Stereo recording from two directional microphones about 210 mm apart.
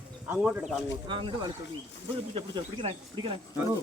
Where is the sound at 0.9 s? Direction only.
25° right (ahead or behind).